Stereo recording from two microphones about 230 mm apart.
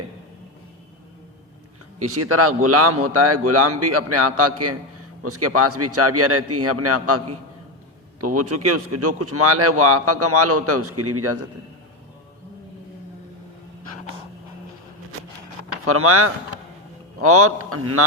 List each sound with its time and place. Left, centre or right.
2.0 s a man's voice: right
5.2 s a man's voice: right
8.2 s a man's voice: right
15.8 s a man's voice: right